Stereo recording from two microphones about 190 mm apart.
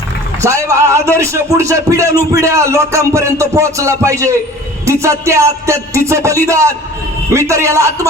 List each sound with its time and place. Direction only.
0.4 s speech: 15° right (ahead or behind)